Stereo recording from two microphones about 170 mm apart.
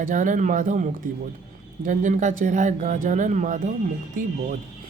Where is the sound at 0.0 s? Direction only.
50° right (ahead or behind).